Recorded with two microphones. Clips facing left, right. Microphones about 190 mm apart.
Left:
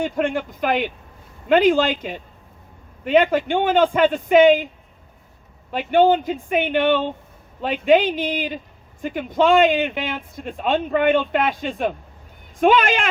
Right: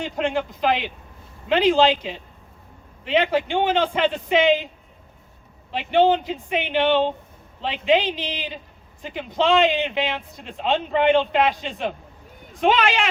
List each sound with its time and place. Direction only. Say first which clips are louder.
0.0 s a man's voice: left 2 dB; 50° left (ahead or behind)
5.7 s a man's voice: left 2 dB; 50° left (ahead or behind)